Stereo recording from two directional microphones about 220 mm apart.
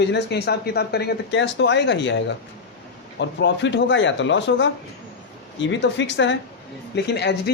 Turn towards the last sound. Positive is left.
turn(degrees=50)  # may be behind; listen again after turning